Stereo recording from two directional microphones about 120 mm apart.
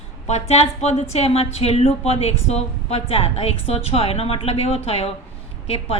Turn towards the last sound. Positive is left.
turn(degrees=55)  # may be behind; listen again after turning